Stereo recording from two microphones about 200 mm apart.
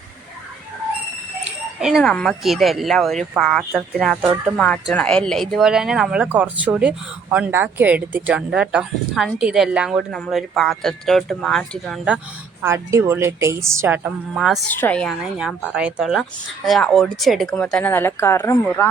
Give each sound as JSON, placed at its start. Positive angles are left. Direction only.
{"t": 1.5, "sound": "speech", "side_deg": -5}
{"t": 12.6, "sound": "a woman's voice", "side_deg": -15}